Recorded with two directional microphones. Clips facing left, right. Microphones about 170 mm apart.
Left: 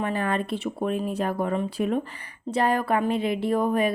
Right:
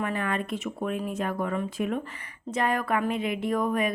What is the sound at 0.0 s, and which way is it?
A woman's voice, 30° left (ahead or behind).